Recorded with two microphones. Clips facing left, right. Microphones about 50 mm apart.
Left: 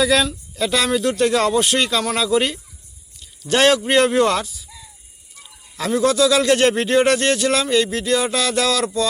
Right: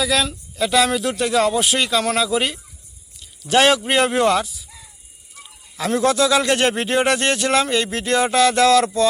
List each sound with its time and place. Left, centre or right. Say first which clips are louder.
0.0 s speech: left 3 dB; centre
5.9 s speech: left 1 dB; right